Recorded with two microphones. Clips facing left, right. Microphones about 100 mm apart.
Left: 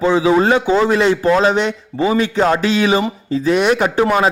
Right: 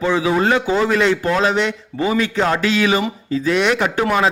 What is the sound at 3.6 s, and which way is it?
Speech, 15° left (ahead or behind).